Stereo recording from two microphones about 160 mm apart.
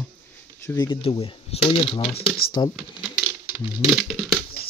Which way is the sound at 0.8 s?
35° left (ahead or behind).